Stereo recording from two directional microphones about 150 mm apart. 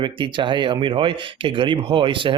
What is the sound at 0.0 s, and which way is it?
Speech, 30° right (ahead or behind).